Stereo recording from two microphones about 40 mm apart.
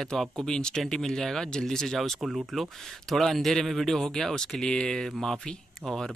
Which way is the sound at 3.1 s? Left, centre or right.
Centre.